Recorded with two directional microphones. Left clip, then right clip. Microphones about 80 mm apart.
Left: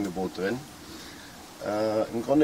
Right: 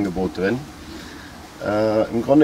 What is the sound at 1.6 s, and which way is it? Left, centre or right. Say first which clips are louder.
Speech: right 8 dB; centre.